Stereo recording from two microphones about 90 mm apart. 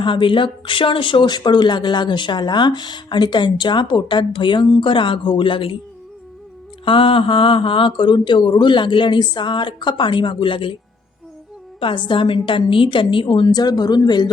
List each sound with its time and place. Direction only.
0.0 s speech: 70° left (ahead or behind)
6.8 s speech: 70° left (ahead or behind)
11.8 s speech: 70° left (ahead or behind)
13.5 s speech: 50° left (ahead or behind)